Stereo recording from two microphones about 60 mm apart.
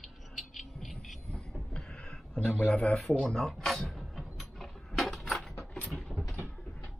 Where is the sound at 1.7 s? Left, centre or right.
Centre.